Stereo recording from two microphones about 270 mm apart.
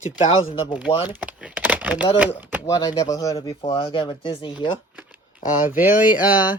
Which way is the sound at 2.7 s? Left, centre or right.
Centre.